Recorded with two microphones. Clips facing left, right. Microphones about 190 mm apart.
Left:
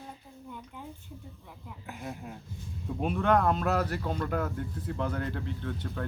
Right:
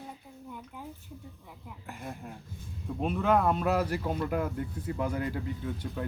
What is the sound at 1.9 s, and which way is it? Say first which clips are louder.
A man's voice: left 1 dB; centre (ahead or behind).